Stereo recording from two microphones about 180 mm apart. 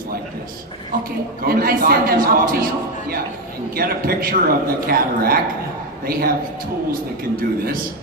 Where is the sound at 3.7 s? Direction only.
55° right (ahead or behind).